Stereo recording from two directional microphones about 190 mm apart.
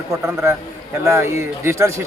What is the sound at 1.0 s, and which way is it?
Speech, 15° right (ahead or behind).